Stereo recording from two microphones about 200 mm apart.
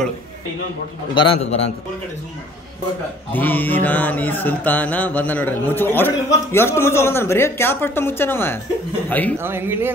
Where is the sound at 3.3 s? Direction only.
10° left (ahead or behind).